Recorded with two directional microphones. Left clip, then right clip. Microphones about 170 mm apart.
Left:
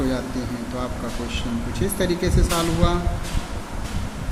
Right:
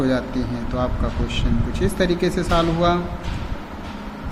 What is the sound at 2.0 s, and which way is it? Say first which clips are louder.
Speech: right 3 dB; 25° right (ahead or behind).